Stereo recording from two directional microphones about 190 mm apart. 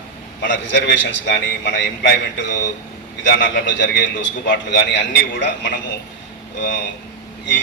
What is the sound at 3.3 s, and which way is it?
A man's voice, 65° left (ahead or behind).